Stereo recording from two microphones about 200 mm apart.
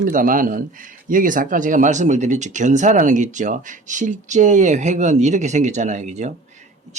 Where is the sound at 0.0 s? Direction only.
45° right (ahead or behind).